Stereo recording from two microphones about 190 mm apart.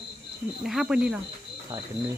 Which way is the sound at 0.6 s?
Centre (ahead or behind).